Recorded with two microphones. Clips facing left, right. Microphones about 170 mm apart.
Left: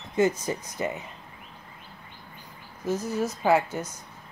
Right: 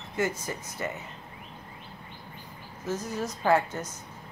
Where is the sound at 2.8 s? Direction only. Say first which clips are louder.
Left 4 dB; 10° left (ahead or behind).